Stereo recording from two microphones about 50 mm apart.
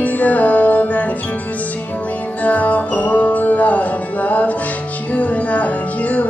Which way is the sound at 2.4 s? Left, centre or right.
Left.